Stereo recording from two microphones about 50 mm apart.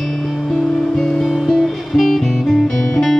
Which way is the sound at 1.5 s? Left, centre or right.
Centre.